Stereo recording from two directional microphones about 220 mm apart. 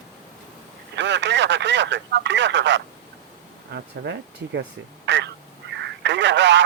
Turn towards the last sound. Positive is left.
turn(degrees=-55)  # may be behind; listen again after turning